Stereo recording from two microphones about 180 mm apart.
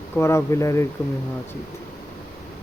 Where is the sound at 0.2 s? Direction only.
15° left (ahead or behind).